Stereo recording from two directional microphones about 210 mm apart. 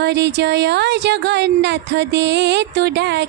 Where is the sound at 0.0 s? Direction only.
55° right (ahead or behind).